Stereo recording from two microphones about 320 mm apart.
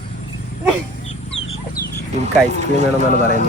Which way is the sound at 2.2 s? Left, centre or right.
Right.